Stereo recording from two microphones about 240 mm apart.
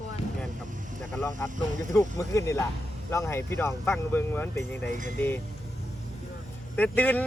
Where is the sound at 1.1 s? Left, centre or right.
Centre.